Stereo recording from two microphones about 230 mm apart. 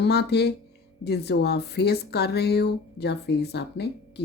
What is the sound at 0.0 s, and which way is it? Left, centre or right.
Speech, left.